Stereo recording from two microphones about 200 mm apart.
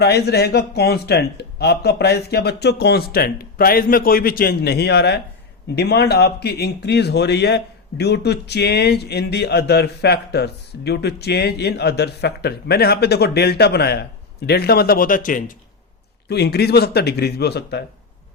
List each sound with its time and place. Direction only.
0.0 s speech: 55° left (ahead or behind)
16.3 s speech: 55° left (ahead or behind)